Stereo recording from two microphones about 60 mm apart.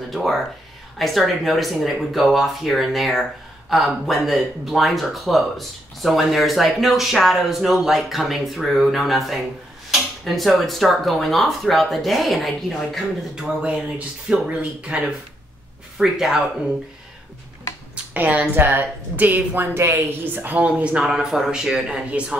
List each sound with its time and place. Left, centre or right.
0.1 s speech: centre
13.3 s speech: centre
18.1 s speech: right
20.5 s speech: right
21.0 s speech: centre